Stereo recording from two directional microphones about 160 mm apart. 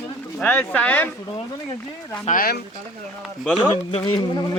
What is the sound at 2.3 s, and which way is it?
Speech, 65° left (ahead or behind).